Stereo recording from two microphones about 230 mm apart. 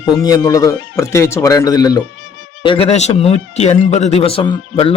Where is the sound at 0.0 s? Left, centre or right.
Centre.